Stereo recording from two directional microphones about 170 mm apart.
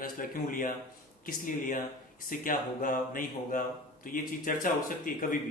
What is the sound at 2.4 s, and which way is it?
Speech, 55° left (ahead or behind).